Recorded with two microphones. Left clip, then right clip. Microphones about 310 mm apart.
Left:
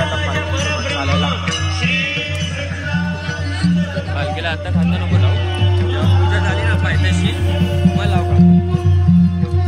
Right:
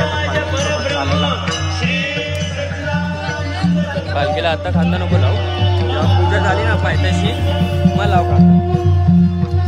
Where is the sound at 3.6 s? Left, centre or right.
Right.